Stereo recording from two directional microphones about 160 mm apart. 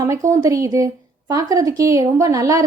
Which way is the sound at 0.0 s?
20° right (ahead or behind).